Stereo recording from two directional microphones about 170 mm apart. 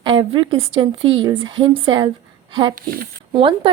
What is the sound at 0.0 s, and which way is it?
A woman's voice, 30° right (ahead or behind).